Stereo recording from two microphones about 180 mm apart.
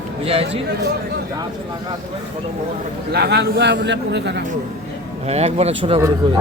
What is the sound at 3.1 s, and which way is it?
A man's voice, 65° right (ahead or behind).